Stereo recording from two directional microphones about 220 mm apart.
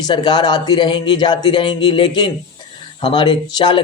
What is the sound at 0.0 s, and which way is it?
Speech, 20° left (ahead or behind).